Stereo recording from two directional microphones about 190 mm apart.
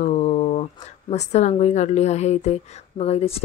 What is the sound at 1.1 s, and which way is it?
A woman's voice, 35° left (ahead or behind).